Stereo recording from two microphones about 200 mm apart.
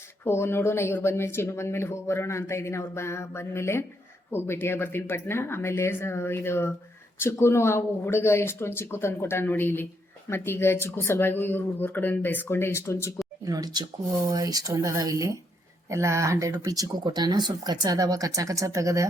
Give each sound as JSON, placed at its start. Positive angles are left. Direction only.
{"t": 0.3, "sound": "speech", "side_deg": 10}
{"t": 13.4, "sound": "speech", "side_deg": -20}